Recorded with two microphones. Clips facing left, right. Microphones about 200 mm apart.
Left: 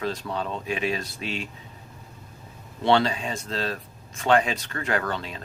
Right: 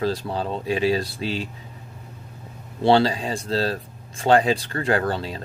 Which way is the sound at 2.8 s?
30° right (ahead or behind).